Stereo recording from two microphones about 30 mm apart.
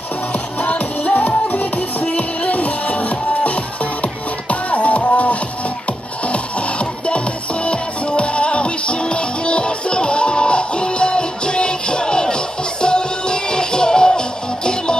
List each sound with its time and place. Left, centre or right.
0.3 s music: left
1.5 s music: left
2.1 s music: left